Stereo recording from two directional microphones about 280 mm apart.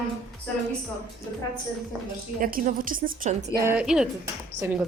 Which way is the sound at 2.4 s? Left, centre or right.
Right.